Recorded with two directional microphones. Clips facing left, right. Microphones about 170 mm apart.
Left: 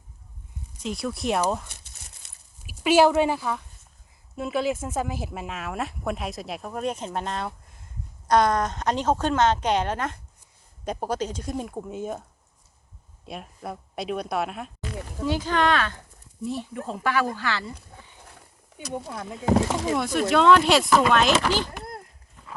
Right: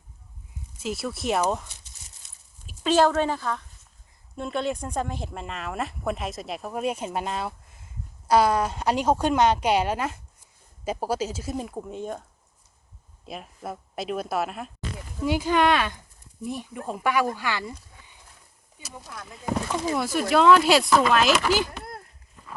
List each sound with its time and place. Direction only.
0.8 s speech: 5° right (ahead or behind)
2.6 s a woman's voice: 10° left (ahead or behind)
13.2 s speech: centre (ahead or behind)
15.2 s a woman's voice: 10° right (ahead or behind)
19.3 s speech: 90° left
19.9 s speech: centre (ahead or behind)
21.7 s a sound: 20° left (ahead or behind)